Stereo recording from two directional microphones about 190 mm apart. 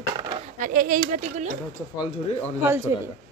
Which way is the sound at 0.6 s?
45° right (ahead or behind).